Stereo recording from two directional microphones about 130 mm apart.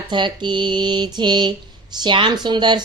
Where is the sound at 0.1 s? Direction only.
35° right (ahead or behind).